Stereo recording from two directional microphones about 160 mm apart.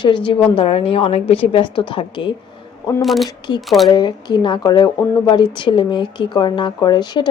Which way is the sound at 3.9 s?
30° left (ahead or behind).